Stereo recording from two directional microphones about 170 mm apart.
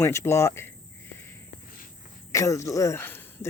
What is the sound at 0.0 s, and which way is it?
Speech, 15° left (ahead or behind).